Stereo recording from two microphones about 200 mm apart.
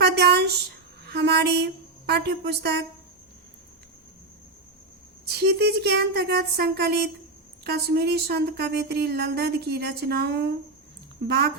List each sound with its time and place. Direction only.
0.0 s a sound: 55° right (ahead or behind)
1.0 s a woman's voice: 55° right (ahead or behind)
5.2 s speech: 55° right (ahead or behind)